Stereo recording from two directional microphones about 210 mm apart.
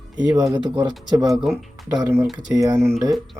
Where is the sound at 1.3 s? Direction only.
Centre (ahead or behind).